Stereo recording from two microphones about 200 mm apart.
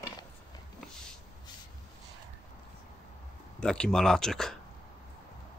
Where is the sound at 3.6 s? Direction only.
5° left (ahead or behind).